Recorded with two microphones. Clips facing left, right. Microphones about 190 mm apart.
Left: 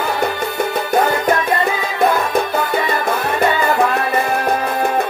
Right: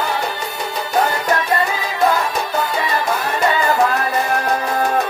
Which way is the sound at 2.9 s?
55° left (ahead or behind).